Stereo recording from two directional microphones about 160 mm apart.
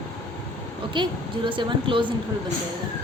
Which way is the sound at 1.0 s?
30° right (ahead or behind).